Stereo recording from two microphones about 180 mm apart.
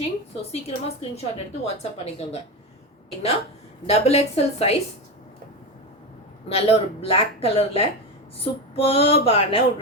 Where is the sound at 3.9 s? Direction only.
35° left (ahead or behind).